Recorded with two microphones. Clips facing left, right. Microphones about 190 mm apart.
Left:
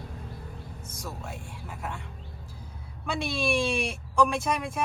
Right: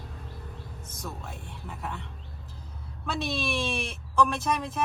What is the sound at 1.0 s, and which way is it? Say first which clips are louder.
Speech: left 1 dB; 5° left (ahead or behind).